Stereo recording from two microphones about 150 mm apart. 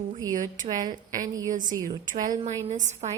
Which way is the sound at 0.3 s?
60° right (ahead or behind).